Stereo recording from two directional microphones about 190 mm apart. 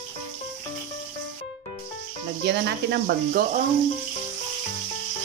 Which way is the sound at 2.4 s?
60° right (ahead or behind).